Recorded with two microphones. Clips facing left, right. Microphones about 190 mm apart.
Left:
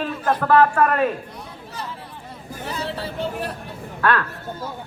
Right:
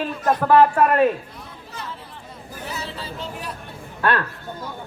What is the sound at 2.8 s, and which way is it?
Speech, 65° left (ahead or behind).